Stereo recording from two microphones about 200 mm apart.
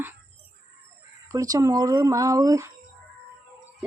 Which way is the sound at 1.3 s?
20° right (ahead or behind).